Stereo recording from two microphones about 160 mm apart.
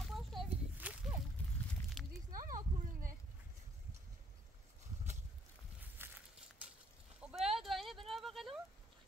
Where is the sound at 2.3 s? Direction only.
60° right (ahead or behind).